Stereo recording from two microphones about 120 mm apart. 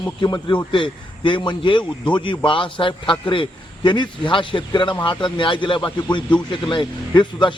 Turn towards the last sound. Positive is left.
turn(degrees=40)  # may be behind; listen again after turning